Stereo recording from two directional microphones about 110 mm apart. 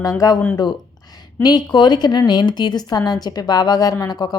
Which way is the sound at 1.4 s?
40° left (ahead or behind).